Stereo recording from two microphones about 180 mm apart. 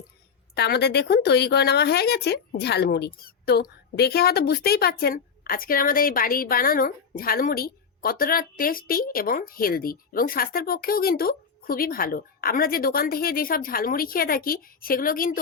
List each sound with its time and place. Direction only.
0.5 s speech: 65° left (ahead or behind)